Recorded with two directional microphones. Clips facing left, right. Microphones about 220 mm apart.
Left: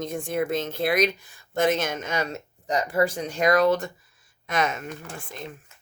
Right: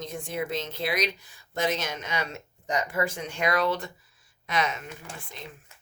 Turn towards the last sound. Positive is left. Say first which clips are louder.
# left 5 dB
turn(degrees=50)  # may be behind; listen again after turning